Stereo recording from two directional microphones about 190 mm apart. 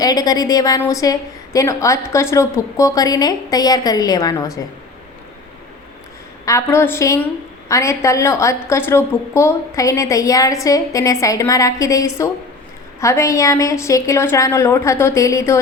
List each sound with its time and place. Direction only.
0.0 s a woman's voice: 20° left (ahead or behind)
6.4 s a woman's voice: 15° left (ahead or behind)